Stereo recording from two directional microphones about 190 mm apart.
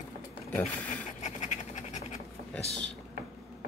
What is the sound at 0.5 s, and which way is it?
Speech, 5° left (ahead or behind).